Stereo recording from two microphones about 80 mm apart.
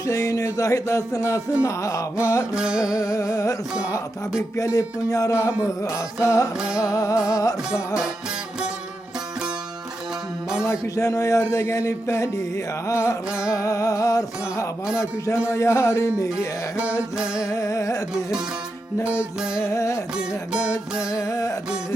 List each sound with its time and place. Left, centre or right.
0.0 s music: left
2.6 s music: centre
2.9 s music: left
6.6 s music: centre
6.9 s music: left
7.7 s music: centre
10.7 s music: left
17.0 s music: centre
17.5 s music: left
19.0 s music: centre
19.6 s music: left
20.1 s music: centre
21.2 s music: left